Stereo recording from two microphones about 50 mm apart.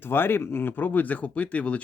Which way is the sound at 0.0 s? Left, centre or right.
Left.